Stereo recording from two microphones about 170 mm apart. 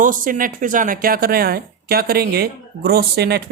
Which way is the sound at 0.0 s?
50° right (ahead or behind).